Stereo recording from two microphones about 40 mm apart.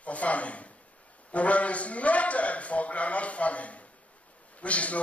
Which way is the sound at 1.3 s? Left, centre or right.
Left.